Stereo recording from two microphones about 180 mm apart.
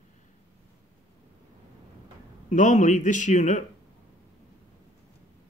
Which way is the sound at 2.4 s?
40° left (ahead or behind).